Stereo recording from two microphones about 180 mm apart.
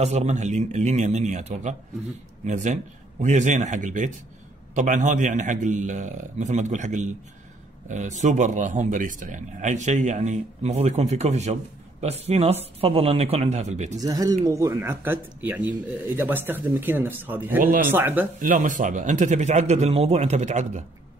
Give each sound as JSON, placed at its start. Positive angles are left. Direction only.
{"t": 0.0, "sound": "a man's voice", "side_deg": -35}
{"t": 14.0, "sound": "speech", "side_deg": -20}
{"t": 18.4, "sound": "a man's voice", "side_deg": -50}